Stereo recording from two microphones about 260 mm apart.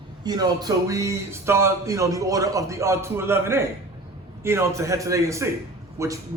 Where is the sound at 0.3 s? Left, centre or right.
Centre.